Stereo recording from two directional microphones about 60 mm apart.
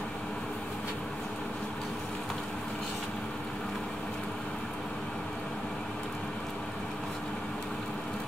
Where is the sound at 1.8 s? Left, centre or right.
Centre.